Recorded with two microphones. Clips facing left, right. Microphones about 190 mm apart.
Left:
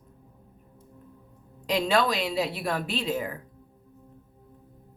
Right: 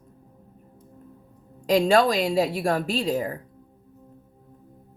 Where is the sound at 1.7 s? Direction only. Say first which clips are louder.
Right 6 dB; 45° right (ahead or behind).